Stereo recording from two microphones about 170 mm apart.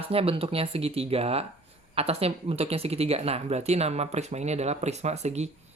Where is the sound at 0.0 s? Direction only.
35° right (ahead or behind).